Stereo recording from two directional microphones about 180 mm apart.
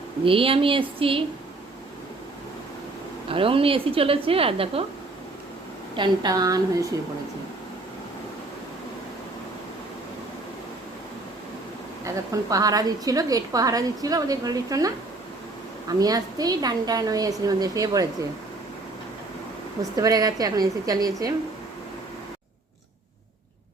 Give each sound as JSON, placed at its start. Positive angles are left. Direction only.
{"t": 0.3, "sound": "a woman's voice", "side_deg": -30}
{"t": 3.2, "sound": "a woman's voice", "side_deg": -30}
{"t": 6.0, "sound": "a woman's voice", "side_deg": -20}
{"t": 12.0, "sound": "a woman's voice", "side_deg": -20}
{"t": 19.8, "sound": "a woman's voice", "side_deg": -20}